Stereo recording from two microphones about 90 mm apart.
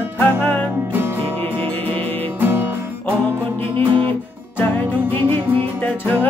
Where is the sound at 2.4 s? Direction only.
20° right (ahead or behind).